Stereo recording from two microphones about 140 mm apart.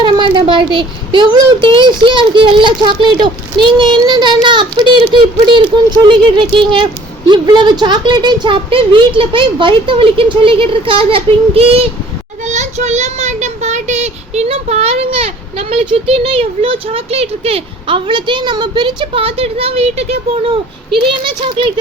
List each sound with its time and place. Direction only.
0.0 s speech: 35° right (ahead or behind)
12.5 s a child's voice: 55° right (ahead or behind); by 21.7 s 35° right (ahead or behind)